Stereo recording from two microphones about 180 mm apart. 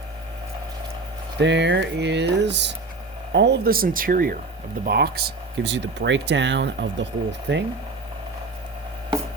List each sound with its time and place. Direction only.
1.4 s speech: 75° right (ahead or behind)